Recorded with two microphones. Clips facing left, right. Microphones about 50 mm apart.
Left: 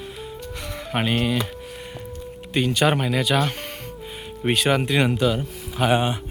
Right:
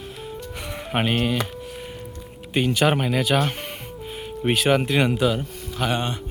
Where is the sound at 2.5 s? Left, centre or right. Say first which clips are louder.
Even; centre.